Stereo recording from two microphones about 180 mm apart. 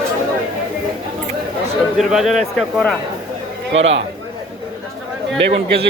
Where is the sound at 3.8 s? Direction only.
90° right.